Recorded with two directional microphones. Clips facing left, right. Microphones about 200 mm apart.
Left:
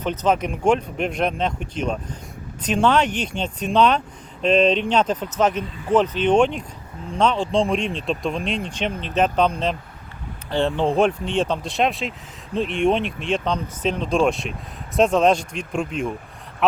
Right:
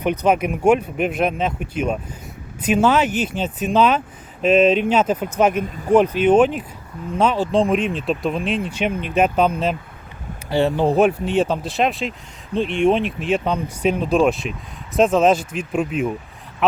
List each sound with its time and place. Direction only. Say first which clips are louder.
0.0 s speech: right 3 dB; 15° right (ahead or behind)
5.6 s speech: right 4 dB; 40° right (ahead or behind)
5.9 s speech: right 4 dB; 10° right (ahead or behind)